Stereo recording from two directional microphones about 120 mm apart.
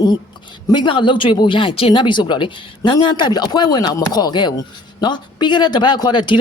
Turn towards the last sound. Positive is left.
turn(degrees=40)  # may be behind; listen again after turning